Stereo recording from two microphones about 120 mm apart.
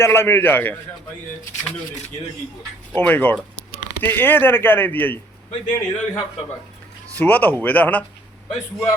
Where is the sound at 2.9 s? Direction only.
15° left (ahead or behind).